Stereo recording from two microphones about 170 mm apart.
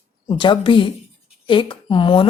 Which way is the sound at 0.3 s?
30° left (ahead or behind).